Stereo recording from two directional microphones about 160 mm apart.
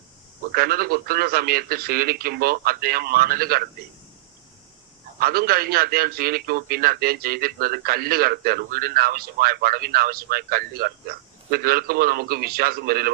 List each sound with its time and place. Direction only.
0.5 s a man's voice: 70° right (ahead or behind)
5.2 s a man's voice: 70° right (ahead or behind)